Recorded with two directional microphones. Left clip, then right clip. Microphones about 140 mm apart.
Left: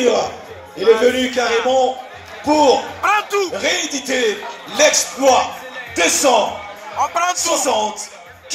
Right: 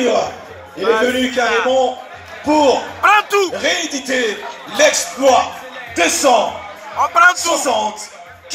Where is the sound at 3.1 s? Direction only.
35° right (ahead or behind).